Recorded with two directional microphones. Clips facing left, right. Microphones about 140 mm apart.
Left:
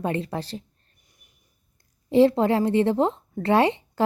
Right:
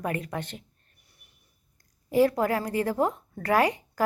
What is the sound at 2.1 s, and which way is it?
A woman's voice, 25° left (ahead or behind).